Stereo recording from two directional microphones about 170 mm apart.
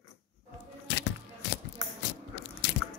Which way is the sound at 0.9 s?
90° left.